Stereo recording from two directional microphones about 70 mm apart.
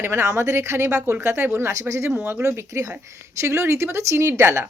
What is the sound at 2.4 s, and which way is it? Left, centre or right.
A woman's voice, right.